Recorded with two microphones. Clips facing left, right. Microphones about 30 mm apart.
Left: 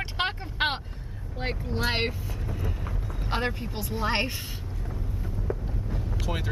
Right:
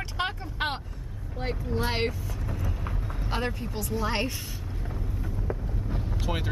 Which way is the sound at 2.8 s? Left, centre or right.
Centre.